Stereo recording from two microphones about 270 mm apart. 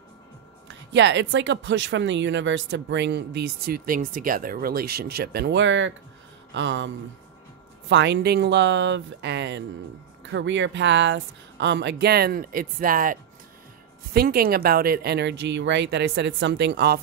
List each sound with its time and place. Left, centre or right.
0.7 s speech: right
7.9 s speech: right